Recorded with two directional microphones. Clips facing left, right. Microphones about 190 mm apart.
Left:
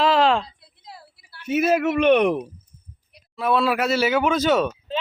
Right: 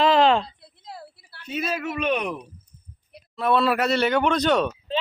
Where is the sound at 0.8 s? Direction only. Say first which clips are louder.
Right 4 dB; 55° right (ahead or behind).